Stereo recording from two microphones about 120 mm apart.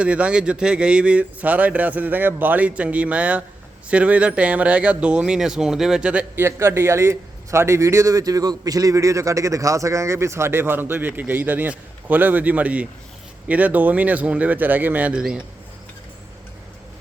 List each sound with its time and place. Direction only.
0.0 s speech: 10° right (ahead or behind)